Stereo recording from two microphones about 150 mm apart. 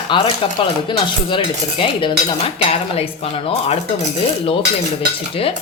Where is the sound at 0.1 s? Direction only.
35° left (ahead or behind).